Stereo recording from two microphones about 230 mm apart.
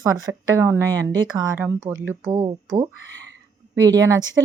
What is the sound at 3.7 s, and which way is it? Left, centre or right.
Speech, centre.